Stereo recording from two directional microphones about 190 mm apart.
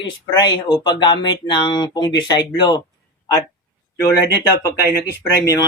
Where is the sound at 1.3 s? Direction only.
25° left (ahead or behind).